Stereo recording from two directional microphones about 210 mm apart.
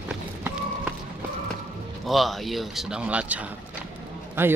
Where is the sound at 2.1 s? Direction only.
Centre (ahead or behind).